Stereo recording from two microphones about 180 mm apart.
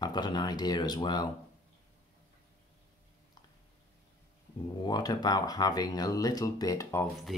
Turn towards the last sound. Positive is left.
turn(degrees=20)  # may be behind; listen again after turning